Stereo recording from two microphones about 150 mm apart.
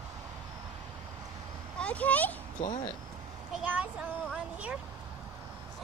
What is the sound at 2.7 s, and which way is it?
Speech, 30° left (ahead or behind).